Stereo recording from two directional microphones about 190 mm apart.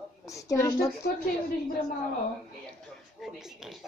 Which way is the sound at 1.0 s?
50° left (ahead or behind).